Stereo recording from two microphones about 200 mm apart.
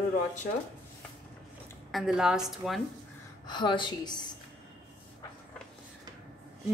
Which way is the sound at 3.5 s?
25° left (ahead or behind).